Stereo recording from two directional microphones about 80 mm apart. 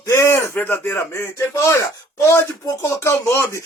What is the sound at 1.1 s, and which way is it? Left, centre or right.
Speech, left.